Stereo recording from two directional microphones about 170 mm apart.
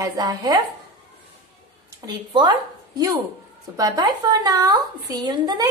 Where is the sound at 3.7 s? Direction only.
20° right (ahead or behind).